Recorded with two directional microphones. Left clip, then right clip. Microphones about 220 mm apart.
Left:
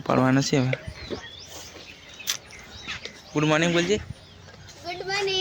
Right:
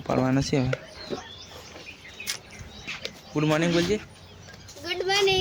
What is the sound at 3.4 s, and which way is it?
Speech, 15° left (ahead or behind).